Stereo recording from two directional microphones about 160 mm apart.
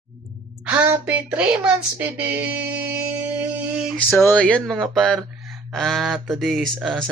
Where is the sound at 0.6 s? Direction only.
10° right (ahead or behind).